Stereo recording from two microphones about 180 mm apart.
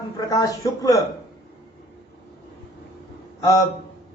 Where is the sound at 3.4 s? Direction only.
20° left (ahead or behind).